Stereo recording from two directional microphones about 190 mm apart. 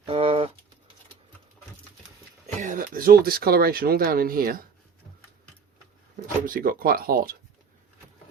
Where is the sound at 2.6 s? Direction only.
45° right (ahead or behind).